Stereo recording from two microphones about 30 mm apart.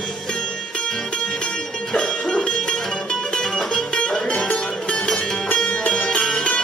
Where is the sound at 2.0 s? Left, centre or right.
Left.